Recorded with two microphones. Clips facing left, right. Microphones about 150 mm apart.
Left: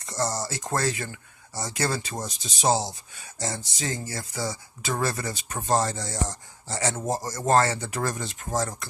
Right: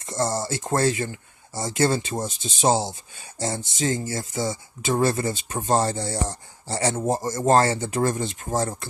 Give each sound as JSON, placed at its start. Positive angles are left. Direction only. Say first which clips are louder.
{"t": 0.0, "sound": "speech", "louder": "right 3 dB", "side_deg": -25}